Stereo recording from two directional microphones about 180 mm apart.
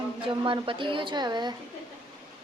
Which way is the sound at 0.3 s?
30° right (ahead or behind).